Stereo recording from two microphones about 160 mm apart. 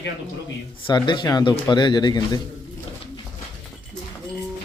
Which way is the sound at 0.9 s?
30° left (ahead or behind).